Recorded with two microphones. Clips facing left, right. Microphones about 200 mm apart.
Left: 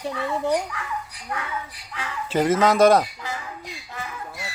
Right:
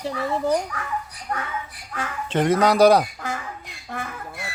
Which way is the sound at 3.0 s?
50° right (ahead or behind).